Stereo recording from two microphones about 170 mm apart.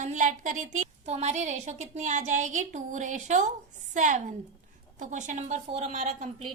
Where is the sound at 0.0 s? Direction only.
50° right (ahead or behind).